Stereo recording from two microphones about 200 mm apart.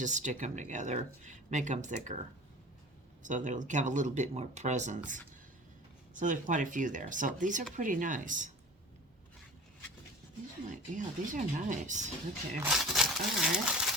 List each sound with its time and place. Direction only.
0.0 s speech: 40° right (ahead or behind)
3.2 s speech: 40° right (ahead or behind)
6.1 s speech: 40° right (ahead or behind)
10.7 s speech: 40° right (ahead or behind)
12.7 s speech: centre (ahead or behind)